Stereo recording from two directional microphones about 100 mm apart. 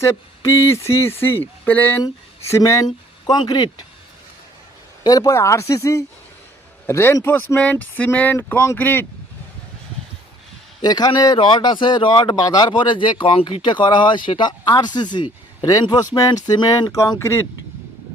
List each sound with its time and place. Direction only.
0.0 s a sound: 30° left (ahead or behind)
1.2 s speech: 20° left (ahead or behind)
2.4 s speech: 30° left (ahead or behind)
5.0 s speech: 40° left (ahead or behind)
6.8 s a sound: 30° left (ahead or behind)
7.3 s speech: 20° left (ahead or behind)
8.6 s a sound: 25° left (ahead or behind)
10.8 s speech: 40° left (ahead or behind)
11.3 s speech: 50° left (ahead or behind)
15.6 s speech: 40° left (ahead or behind)